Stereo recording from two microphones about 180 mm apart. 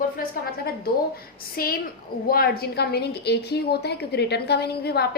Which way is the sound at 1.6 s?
55° left (ahead or behind).